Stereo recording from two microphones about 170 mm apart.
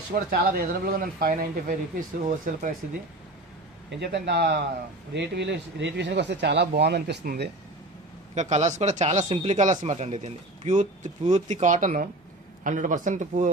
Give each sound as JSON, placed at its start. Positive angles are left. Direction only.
{"t": 0.1, "sound": "speech", "side_deg": -60}
{"t": 4.0, "sound": "speech", "side_deg": -80}
{"t": 5.1, "sound": "speech", "side_deg": -85}
{"t": 8.4, "sound": "speech", "side_deg": -40}